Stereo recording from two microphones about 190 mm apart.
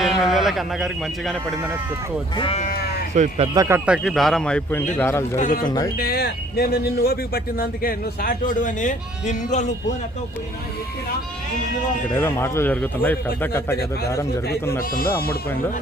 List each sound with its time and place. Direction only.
0.0 s speech: centre (ahead or behind)
2.3 s speech: 30° left (ahead or behind)
3.2 s speech: 30° right (ahead or behind)
3.5 s speech: 20° right (ahead or behind)
3.8 s a man's voice: centre (ahead or behind)
5.4 s speech: 45° left (ahead or behind)
5.6 s speech: 20° left (ahead or behind)
6.0 s speech: 55° left (ahead or behind); by 9.7 s 40° left (ahead or behind)
12.1 s a man's voice: 10° left (ahead or behind)